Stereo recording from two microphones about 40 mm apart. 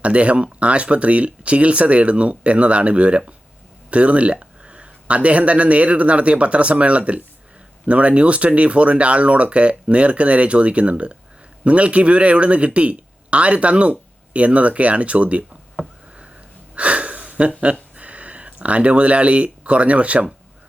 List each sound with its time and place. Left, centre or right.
0.0 s speech: right
16.7 s a sound: right
17.6 s speech: right